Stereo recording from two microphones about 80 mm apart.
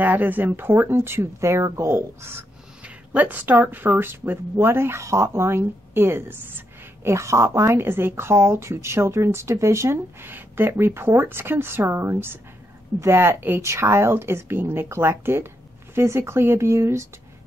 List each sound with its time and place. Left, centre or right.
0.0 s speech: right
2.8 s a woman's voice: centre; by 17.1 s right